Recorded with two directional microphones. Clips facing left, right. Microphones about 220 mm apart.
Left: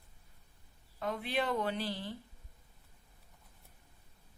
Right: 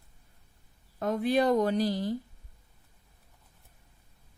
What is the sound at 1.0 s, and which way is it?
Speech, 45° right (ahead or behind).